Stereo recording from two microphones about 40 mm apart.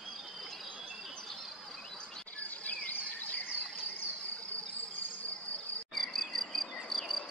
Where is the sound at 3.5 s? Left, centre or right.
Right.